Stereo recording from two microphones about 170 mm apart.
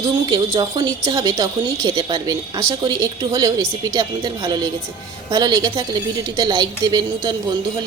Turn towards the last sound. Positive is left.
turn(degrees=-25)  # may be behind; listen again after turning